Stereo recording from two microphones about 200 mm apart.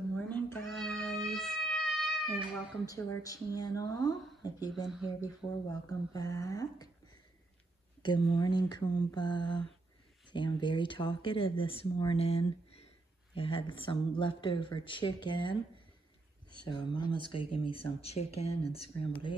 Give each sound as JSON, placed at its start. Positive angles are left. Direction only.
{"t": 0.1, "sound": "cat", "side_deg": 5}
{"t": 1.2, "sound": "a sound", "side_deg": 0}
{"t": 2.8, "sound": "speech", "side_deg": 15}
{"t": 4.8, "sound": "speech", "side_deg": -5}
{"t": 5.4, "sound": "speech", "side_deg": 20}
{"t": 8.0, "sound": "speech", "side_deg": 20}
{"t": 16.5, "sound": "speech", "side_deg": 20}